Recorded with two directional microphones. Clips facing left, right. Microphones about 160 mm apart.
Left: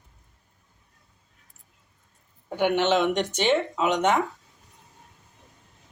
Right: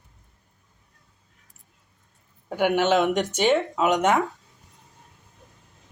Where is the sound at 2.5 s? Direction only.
10° right (ahead or behind).